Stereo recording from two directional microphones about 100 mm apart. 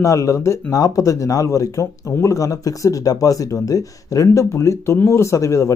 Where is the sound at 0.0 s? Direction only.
30° left (ahead or behind).